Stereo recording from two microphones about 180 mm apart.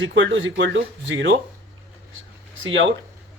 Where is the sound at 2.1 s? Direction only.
90° right.